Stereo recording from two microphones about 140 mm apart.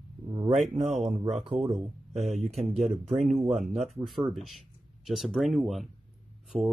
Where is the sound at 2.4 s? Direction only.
50° right (ahead or behind).